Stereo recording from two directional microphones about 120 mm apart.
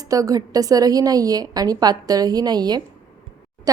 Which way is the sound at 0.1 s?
30° right (ahead or behind).